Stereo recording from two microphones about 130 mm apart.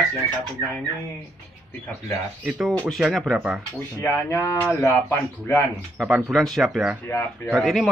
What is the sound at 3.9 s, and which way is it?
Speech, 20° left (ahead or behind).